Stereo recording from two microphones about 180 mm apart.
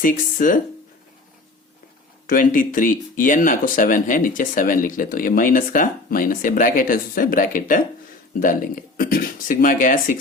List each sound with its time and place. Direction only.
0.0 s speech: 50° left (ahead or behind)
2.2 s speech: 50° left (ahead or behind)